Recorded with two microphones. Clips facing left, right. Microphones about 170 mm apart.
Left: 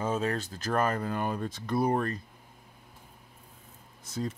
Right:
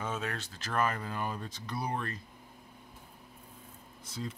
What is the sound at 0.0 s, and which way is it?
Speech, 35° left (ahead or behind).